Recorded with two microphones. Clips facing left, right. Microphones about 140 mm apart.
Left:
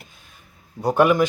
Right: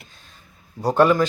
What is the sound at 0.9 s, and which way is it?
Speech, 15° left (ahead or behind).